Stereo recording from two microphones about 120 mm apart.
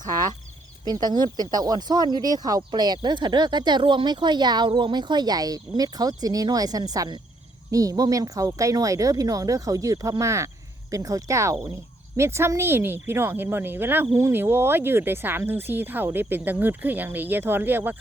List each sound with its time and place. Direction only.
0.0 s cricket: 35° right (ahead or behind)
0.9 s speech: 35° right (ahead or behind); by 17.9 s 15° right (ahead or behind)